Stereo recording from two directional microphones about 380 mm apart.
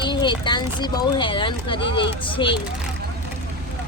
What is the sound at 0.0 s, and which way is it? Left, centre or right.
Speech, centre.